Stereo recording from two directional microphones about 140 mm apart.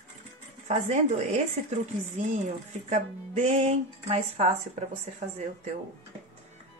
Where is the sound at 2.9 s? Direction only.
55° right (ahead or behind).